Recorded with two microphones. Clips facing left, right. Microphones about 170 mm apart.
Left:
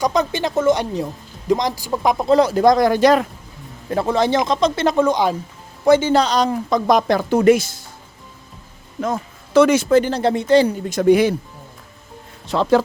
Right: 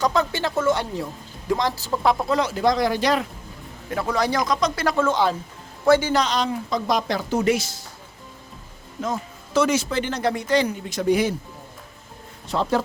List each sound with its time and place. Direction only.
0.0 s a woman's voice: 20° left (ahead or behind)
2.3 s speech: 35° left (ahead or behind)
3.8 s speech: 30° left (ahead or behind); by 7.8 s 50° left (ahead or behind)
9.0 s speech: 60° left (ahead or behind)
10.0 s a woman's voice: 30° left (ahead or behind)
11.0 s speech: 65° left (ahead or behind)
12.5 s speech: 90° left